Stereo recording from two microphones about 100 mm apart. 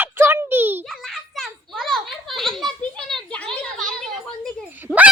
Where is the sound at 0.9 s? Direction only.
Centre (ahead or behind).